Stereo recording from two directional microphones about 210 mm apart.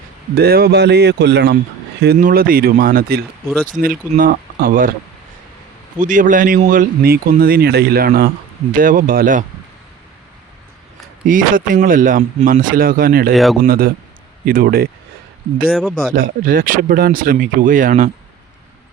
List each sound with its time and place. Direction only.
0.3 s speech: 45° right (ahead or behind)
2.1 s a man's voice: 40° right (ahead or behind)
6.0 s a man's voice: 40° right (ahead or behind)
11.3 s a man's voice: 40° right (ahead or behind)
13.3 s speech: centre (ahead or behind)
13.7 s speech: 45° right (ahead or behind)
15.7 s speech: centre (ahead or behind)
16.1 s a man's voice: 45° right (ahead or behind)